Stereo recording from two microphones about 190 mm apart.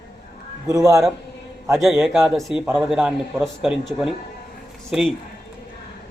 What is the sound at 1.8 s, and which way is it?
A man's voice, centre (ahead or behind).